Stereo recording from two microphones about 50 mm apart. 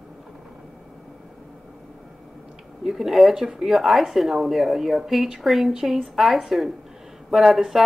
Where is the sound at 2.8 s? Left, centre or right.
Centre.